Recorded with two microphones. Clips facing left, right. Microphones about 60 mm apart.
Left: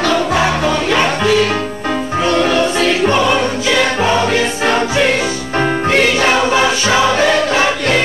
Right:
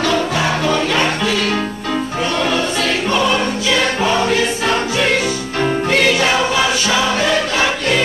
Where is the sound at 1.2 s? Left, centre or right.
Left.